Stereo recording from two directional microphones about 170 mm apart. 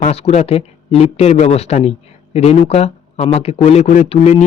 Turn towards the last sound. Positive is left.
turn(degrees=40)  # may be behind; listen again after turning